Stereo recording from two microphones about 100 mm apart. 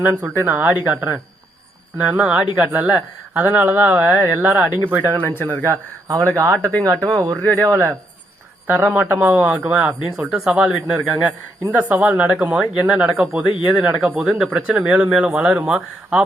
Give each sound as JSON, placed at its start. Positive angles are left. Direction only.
{"t": 0.0, "sound": "speech", "side_deg": -20}
{"t": 6.6, "sound": "speech", "side_deg": 15}
{"t": 6.8, "sound": "speech", "side_deg": -25}
{"t": 8.6, "sound": "speech", "side_deg": -20}